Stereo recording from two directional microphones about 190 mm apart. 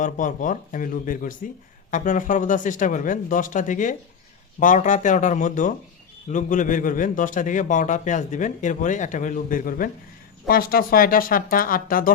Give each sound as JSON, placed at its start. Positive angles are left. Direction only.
{"t": 0.0, "sound": "a man's voice", "side_deg": 45}